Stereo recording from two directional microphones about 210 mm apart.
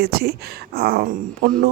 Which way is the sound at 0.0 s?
50° right (ahead or behind).